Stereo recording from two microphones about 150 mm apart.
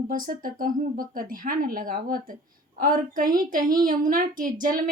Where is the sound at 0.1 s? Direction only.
65° right (ahead or behind).